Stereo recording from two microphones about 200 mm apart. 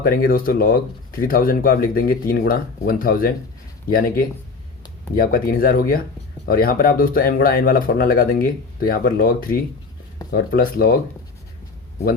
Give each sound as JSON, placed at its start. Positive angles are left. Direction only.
{"t": 0.0, "sound": "speech", "side_deg": 45}